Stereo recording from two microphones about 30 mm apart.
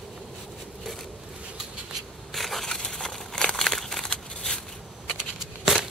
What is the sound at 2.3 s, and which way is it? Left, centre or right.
Crushing, centre.